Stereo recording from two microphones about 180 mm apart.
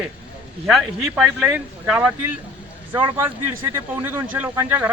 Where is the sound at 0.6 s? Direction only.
Centre (ahead or behind).